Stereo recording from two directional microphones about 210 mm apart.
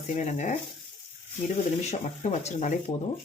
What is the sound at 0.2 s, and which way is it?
Speech, 35° left (ahead or behind).